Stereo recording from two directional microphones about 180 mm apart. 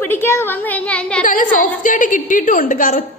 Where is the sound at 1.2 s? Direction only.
45° left (ahead or behind).